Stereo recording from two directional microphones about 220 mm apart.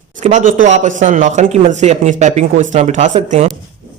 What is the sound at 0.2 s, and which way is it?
Speech, 35° right (ahead or behind).